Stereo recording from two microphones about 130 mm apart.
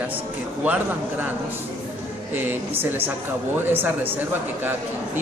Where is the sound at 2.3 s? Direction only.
15° right (ahead or behind).